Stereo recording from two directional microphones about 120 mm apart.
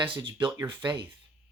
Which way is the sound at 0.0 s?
45° right (ahead or behind).